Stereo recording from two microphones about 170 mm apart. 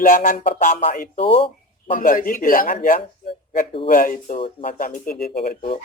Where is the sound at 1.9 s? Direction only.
55° left (ahead or behind).